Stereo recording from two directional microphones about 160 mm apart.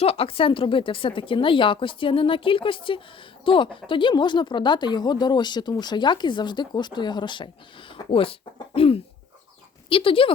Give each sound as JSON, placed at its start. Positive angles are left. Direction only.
{"t": 0.0, "sound": "speech", "side_deg": 35}